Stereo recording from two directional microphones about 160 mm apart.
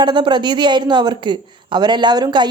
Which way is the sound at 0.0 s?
30° right (ahead or behind).